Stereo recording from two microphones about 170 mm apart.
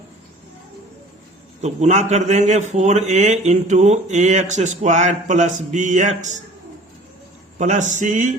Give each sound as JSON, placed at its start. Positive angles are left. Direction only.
{"t": 1.6, "sound": "a man's voice", "side_deg": -40}
{"t": 7.6, "sound": "a man's voice", "side_deg": -45}